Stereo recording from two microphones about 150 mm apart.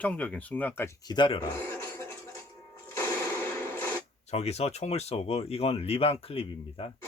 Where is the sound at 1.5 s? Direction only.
15° left (ahead or behind).